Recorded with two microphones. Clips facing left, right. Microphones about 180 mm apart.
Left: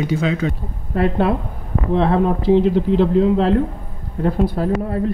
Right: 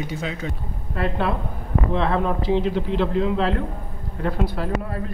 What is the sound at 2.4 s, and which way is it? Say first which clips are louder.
Speech: left 7 dB; 50° left (ahead or behind).